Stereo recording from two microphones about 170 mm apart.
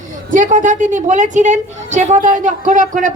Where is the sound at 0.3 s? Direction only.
50° right (ahead or behind).